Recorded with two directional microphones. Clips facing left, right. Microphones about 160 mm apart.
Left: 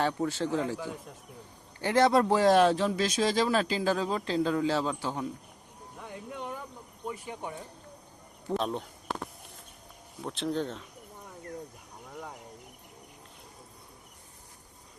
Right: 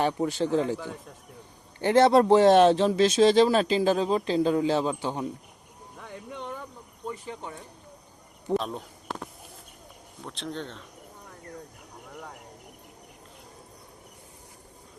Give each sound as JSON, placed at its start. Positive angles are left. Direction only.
{"t": 0.0, "sound": "a man's voice", "side_deg": -15}
{"t": 1.8, "sound": "speech", "side_deg": -25}
{"t": 6.0, "sound": "a sound", "side_deg": 10}
{"t": 7.1, "sound": "speech", "side_deg": 10}
{"t": 8.5, "sound": "speech", "side_deg": 0}
{"t": 10.2, "sound": "speech", "side_deg": 0}